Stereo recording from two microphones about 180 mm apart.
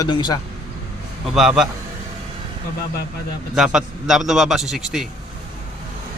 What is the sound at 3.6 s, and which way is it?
A man's voice, 5° right (ahead or behind).